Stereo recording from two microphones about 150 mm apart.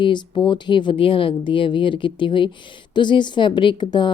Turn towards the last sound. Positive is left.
turn(degrees=30)  # may be behind; listen again after turning